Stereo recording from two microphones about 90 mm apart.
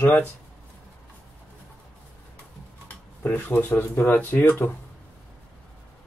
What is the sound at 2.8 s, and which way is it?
Speech, 15° left (ahead or behind).